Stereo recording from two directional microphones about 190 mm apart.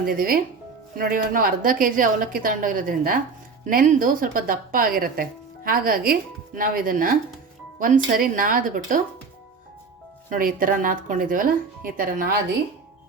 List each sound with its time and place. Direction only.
0.0 s speech: 50° right (ahead or behind)
10.2 s speech: 45° right (ahead or behind)